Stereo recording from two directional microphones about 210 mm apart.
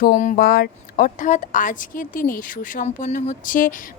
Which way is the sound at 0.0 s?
40° left (ahead or behind).